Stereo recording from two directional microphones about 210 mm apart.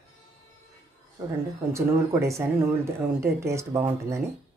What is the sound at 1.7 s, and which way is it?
A woman's voice, 15° right (ahead or behind).